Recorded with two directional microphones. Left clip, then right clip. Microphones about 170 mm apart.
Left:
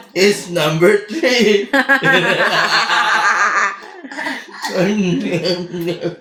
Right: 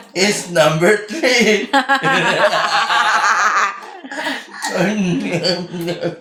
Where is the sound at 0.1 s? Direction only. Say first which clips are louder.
Left 2 dB; 35° right (ahead or behind).